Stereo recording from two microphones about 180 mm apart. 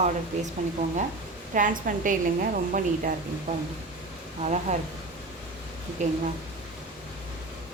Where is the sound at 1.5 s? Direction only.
45° right (ahead or behind).